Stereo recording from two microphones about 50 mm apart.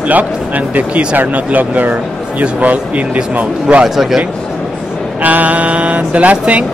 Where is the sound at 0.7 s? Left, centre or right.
Right.